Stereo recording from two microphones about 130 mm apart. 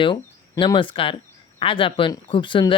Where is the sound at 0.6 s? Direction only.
40° left (ahead or behind).